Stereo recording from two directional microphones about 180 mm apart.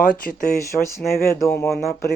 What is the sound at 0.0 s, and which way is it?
Speech, 50° left (ahead or behind).